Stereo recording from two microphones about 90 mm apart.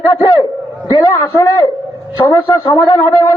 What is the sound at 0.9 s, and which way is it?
A man's voice, 55° left (ahead or behind).